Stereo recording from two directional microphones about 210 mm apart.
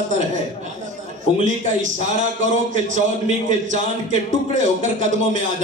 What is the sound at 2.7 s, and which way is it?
A man's voice, 35° right (ahead or behind).